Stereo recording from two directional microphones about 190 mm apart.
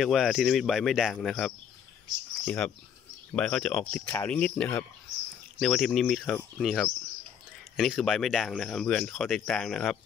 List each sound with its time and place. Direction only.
0.0 s speech: centre (ahead or behind)